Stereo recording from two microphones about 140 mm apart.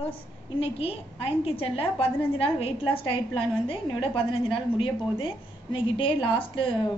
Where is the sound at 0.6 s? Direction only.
45° left (ahead or behind).